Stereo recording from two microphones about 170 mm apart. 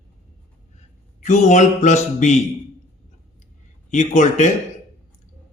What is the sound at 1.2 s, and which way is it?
A man's voice, 45° left (ahead or behind).